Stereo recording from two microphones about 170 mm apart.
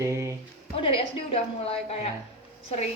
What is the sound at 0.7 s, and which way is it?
A woman's voice, 35° left (ahead or behind).